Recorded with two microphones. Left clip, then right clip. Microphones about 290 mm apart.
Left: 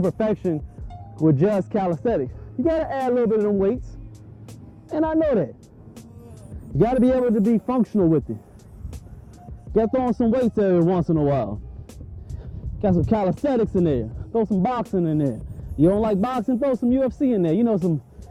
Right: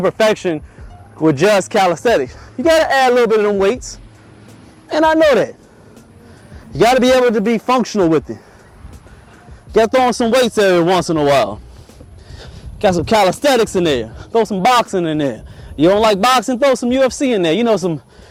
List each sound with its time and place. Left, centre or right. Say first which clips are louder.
0.0 s a man's voice: right 9 dB; centre
6.7 s a man's voice: right 9 dB; centre
9.7 s a man's voice: right 9 dB; centre
12.4 s a sound: right 10 dB; centre
13.0 s a man's voice: right 11 dB; centre